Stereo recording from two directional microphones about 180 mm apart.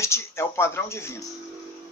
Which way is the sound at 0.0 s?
15° left (ahead or behind).